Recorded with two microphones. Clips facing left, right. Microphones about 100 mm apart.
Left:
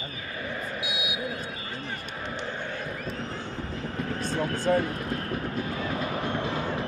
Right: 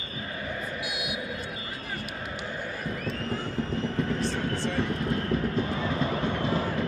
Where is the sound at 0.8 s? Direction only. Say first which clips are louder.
Even; 50° right (ahead or behind).